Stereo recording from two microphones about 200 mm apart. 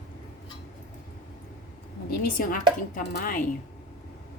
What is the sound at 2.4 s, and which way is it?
A woman's voice, 45° left (ahead or behind).